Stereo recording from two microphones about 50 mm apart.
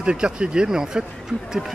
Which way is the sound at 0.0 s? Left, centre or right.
Centre.